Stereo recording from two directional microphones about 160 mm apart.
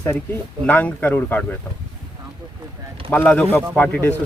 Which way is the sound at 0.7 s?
10° left (ahead or behind).